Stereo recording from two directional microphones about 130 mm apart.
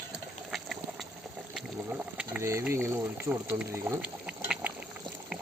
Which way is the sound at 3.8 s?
25° right (ahead or behind).